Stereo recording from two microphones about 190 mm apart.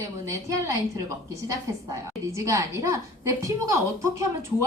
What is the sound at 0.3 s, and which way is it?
A woman's voice, 15° right (ahead or behind).